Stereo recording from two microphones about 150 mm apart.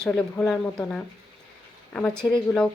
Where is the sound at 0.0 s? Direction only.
5° left (ahead or behind).